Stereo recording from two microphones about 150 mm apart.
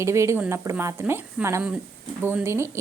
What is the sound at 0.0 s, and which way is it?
A woman's voice, 20° right (ahead or behind).